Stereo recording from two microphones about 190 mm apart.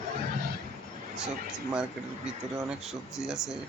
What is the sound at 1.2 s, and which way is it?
Speech, 5° right (ahead or behind).